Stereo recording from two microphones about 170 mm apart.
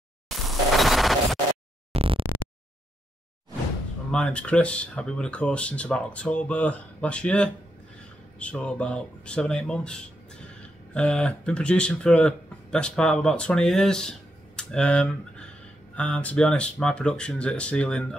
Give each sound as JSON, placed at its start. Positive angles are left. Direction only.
{"t": 0.5, "sound": "smash", "side_deg": 0}
{"t": 2.0, "sound": "a sound", "side_deg": -30}
{"t": 4.1, "sound": "speech", "side_deg": 5}